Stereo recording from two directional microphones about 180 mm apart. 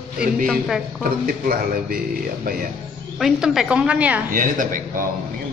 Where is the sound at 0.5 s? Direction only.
Centre (ahead or behind).